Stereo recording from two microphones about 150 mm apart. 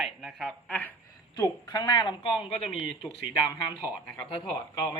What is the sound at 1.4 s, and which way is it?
Speech, 30° left (ahead or behind).